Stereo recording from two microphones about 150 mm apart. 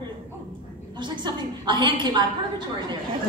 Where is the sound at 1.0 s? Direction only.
30° right (ahead or behind).